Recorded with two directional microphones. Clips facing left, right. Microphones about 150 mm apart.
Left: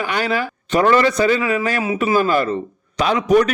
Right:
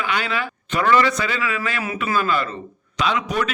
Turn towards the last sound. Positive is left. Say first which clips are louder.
# left 7 dB
turn(degrees=45)  # may be behind; listen again after turning